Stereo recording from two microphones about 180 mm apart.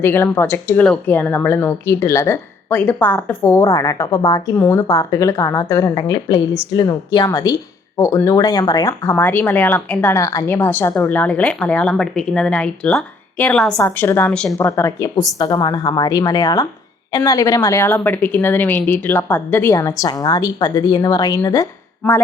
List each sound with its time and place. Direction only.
0.0 s a woman's voice: 15° left (ahead or behind)